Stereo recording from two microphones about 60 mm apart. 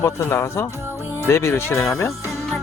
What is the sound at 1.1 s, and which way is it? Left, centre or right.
Speech, left.